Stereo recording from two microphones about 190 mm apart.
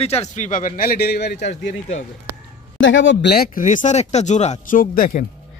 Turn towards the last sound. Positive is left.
turn(degrees=45)  # may be behind; listen again after turning